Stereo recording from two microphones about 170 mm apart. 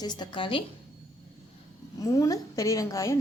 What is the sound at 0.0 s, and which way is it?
Speech, 25° left (ahead or behind).